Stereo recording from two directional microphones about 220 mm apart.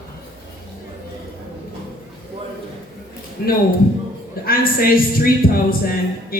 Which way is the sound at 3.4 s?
40° left (ahead or behind).